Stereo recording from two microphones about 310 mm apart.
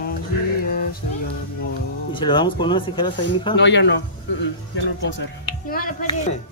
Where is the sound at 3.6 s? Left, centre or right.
Left.